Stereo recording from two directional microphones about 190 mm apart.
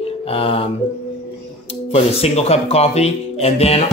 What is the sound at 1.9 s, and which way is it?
Speech, 35° left (ahead or behind).